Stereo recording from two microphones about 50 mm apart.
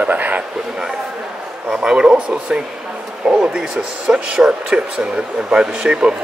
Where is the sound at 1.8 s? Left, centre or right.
Centre.